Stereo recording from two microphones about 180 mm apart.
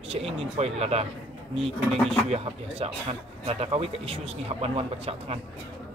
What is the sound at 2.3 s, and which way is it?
Speech, 35° right (ahead or behind).